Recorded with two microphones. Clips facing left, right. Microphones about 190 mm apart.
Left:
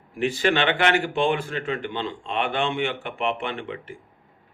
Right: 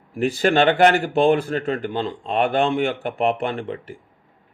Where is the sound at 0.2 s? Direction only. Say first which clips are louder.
Right 4 dB; 35° right (ahead or behind).